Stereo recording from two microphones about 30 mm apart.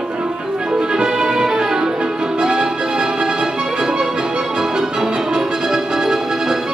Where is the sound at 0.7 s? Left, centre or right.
Right.